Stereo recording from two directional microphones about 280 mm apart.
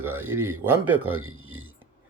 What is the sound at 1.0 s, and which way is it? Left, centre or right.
Speech, right.